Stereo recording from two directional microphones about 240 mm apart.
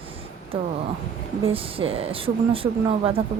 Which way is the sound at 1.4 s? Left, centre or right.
Right.